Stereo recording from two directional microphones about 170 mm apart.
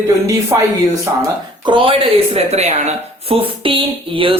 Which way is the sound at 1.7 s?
30° right (ahead or behind).